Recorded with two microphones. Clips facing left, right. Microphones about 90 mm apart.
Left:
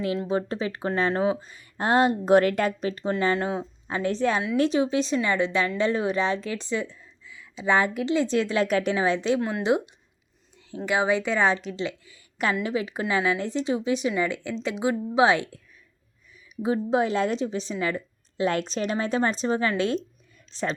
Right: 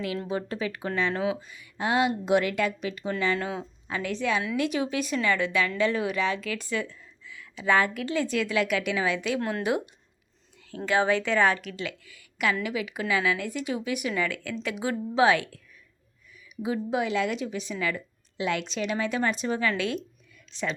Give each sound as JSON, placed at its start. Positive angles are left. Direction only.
{"t": 0.0, "sound": "a woman's voice", "side_deg": 30}
{"t": 9.4, "sound": "a woman's voice", "side_deg": 15}
{"t": 16.6, "sound": "a woman's voice", "side_deg": 35}